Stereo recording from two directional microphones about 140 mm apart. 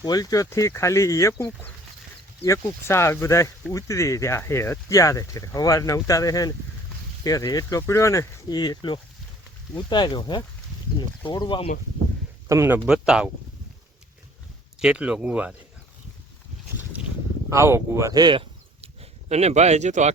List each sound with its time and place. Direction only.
0.0 s speech: 25° left (ahead or behind)
12.5 s speech: 20° right (ahead or behind)
14.8 s speech: 5° right (ahead or behind)
17.5 s speech: 20° right (ahead or behind)
19.3 s speech: 50° right (ahead or behind)